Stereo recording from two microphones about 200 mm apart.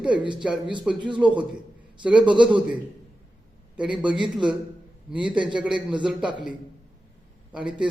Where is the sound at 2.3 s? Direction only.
25° right (ahead or behind).